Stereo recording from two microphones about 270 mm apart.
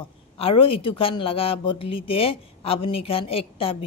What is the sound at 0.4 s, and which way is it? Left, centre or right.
Speech, centre.